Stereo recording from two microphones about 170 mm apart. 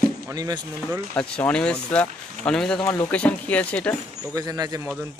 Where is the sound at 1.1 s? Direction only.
5° left (ahead or behind).